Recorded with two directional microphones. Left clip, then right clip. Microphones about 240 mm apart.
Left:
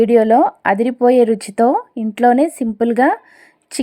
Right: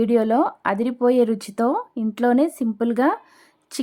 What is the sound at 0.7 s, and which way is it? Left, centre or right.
Speech, right.